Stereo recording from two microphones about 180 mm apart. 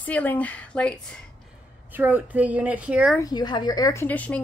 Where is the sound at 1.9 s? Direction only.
10° right (ahead or behind).